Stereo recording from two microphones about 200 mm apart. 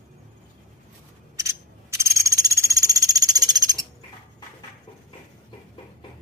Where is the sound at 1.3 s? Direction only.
15° right (ahead or behind).